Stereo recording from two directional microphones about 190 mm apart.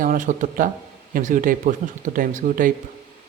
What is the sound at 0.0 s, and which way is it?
Speech, 45° right (ahead or behind).